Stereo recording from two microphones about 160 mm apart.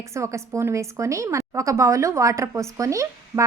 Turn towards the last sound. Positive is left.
turn(degrees=-20)  # may be behind; listen again after turning